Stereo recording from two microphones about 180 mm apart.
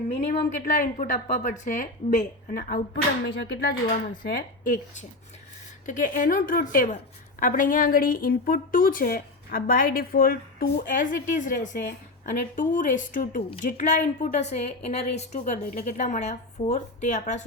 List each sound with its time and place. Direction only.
0.6 s a woman's voice: 45° left (ahead or behind)